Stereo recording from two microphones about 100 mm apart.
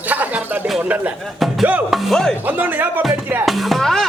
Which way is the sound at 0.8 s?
15° right (ahead or behind).